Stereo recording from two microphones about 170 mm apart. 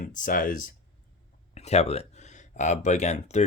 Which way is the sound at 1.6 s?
40° left (ahead or behind).